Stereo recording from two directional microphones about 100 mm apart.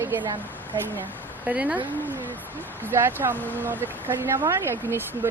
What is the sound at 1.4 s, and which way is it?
Speech, 15° right (ahead or behind).